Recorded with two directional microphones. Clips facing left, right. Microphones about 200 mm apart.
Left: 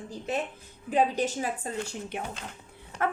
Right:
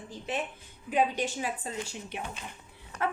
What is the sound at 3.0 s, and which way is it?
Dog, 50° left (ahead or behind).